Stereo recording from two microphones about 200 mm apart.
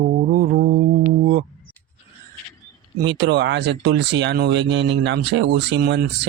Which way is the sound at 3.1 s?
60° right (ahead or behind).